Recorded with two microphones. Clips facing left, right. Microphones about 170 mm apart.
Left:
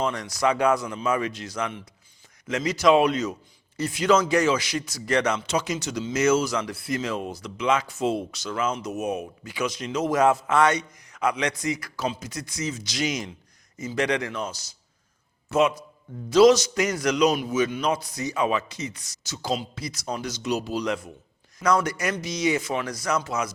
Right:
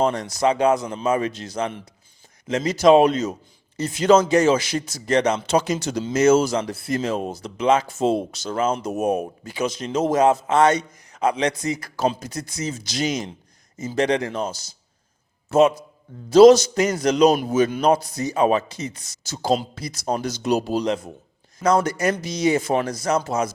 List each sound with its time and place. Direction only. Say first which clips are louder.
0.1 s a man's voice: right 4 dB; 25° right (ahead or behind)
8.9 s speech: right 6 dB; 50° right (ahead or behind)
9.5 s a man's voice: right 3 dB; 25° right (ahead or behind)
11.9 s speech: right 6 dB; 50° right (ahead or behind)
12.3 s a man's voice: right 2 dB; 25° right (ahead or behind)
16.6 s a man's voice: right 4 dB; 30° right (ahead or behind)
17.2 s a man's voice: right 6 dB; 40° right (ahead or behind)
20.1 s speech: right 6 dB; 50° right (ahead or behind)
20.7 s a man's voice: right 5 dB; 30° right (ahead or behind)
22.6 s speech: right 7 dB; 45° right (ahead or behind)
22.9 s a man's voice: right 4 dB; 25° right (ahead or behind)